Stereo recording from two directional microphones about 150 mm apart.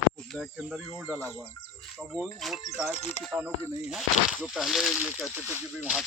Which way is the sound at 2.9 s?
50° left (ahead or behind).